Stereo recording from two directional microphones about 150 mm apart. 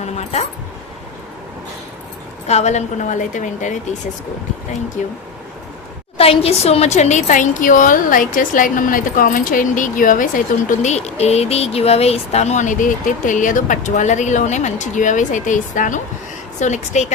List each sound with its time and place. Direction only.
0.0 s keys jangling: 50° left (ahead or behind)
2.5 s a woman's voice: 50° left (ahead or behind)
6.1 s a woman's voice: 40° left (ahead or behind)